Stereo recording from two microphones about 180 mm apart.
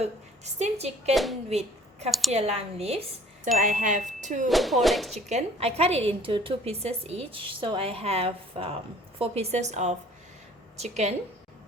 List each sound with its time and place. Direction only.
0.0 s a woman's voice: 35° right (ahead or behind)
1.1 s speech: centre (ahead or behind)
1.5 s speech: 35° right (ahead or behind)
2.0 s speech: centre (ahead or behind)
2.3 s a woman's voice: 35° right (ahead or behind)
3.6 s chime: 45° right (ahead or behind)
4.4 s speech: centre (ahead or behind)
5.1 s a woman's voice: 35° right (ahead or behind)